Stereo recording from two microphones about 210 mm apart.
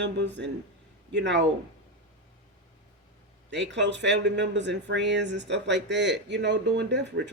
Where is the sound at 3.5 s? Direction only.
55° right (ahead or behind).